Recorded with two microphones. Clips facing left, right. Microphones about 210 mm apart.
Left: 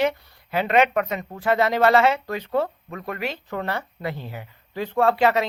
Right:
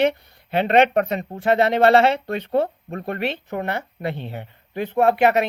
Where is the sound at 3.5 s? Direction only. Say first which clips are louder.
Right 2 dB; 20° right (ahead or behind).